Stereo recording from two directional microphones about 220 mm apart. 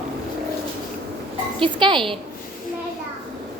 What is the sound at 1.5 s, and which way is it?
Speech, 20° right (ahead or behind).